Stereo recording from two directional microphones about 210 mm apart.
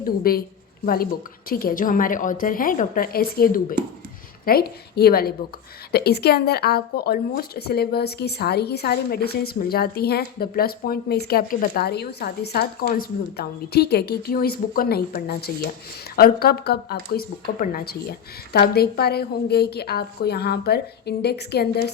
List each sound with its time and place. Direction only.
0.0 s speech: 45° left (ahead or behind)
1.5 s a woman's voice: 45° left (ahead or behind)